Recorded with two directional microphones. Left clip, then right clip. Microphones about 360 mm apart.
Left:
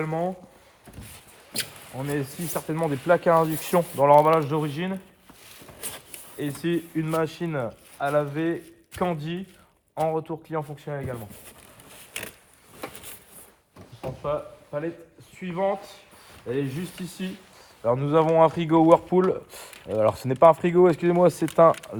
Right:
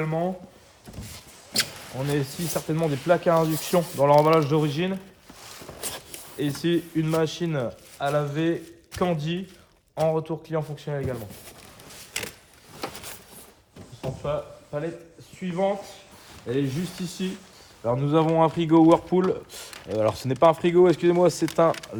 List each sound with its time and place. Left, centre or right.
0.0 s speech: centre
2.0 s speech: centre
14.2 s a sound: centre
15.4 s speech: centre
17.8 s speech: centre